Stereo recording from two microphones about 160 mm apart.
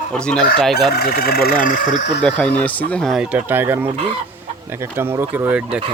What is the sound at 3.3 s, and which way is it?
Speech, 15° right (ahead or behind).